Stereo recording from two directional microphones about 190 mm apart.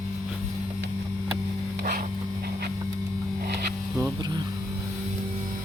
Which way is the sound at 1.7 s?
50° right (ahead or behind).